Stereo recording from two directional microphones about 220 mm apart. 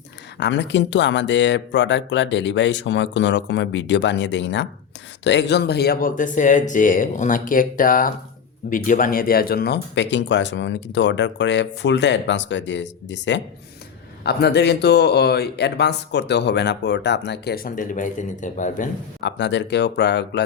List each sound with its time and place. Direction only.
0.3 s speech: 55° left (ahead or behind); by 18.9 s 35° left (ahead or behind)
19.2 s speech: 50° left (ahead or behind)